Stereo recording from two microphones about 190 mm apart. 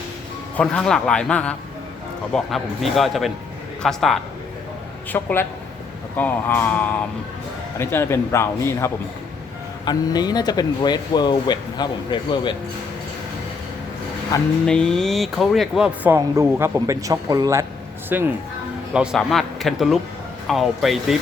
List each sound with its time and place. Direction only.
0.5 s a man's voice: 5° left (ahead or behind); by 12.5 s 25° left (ahead or behind)
14.3 s a man's voice: 20° left (ahead or behind)
14.7 s speech: 5° left (ahead or behind)
18.9 s speech: centre (ahead or behind)